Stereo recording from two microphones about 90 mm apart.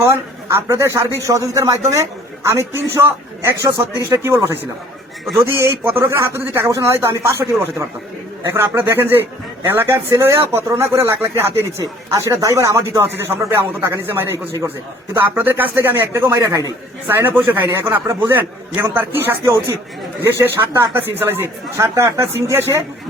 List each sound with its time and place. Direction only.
0.0 s speech: 30° right (ahead or behind)
5.4 s speech: 30° right (ahead or behind)
14.3 s speech: 40° right (ahead or behind)
15.4 s speech: 20° right (ahead or behind)